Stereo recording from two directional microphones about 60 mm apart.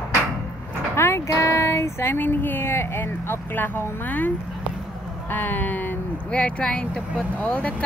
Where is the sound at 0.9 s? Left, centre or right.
Left.